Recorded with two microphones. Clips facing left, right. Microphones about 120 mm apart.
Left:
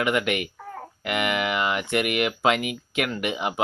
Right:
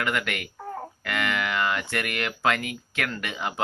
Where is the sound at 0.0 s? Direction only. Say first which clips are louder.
Left 5 dB; 20° left (ahead or behind).